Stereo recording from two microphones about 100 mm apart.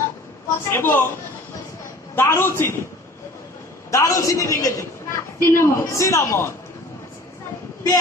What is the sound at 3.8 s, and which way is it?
A woman's voice, 30° left (ahead or behind).